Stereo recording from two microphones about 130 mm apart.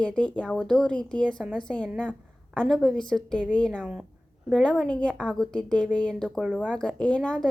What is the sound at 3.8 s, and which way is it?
Speech, 10° right (ahead or behind).